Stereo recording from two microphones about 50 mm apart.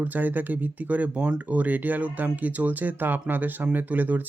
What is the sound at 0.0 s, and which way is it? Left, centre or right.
Speech, right.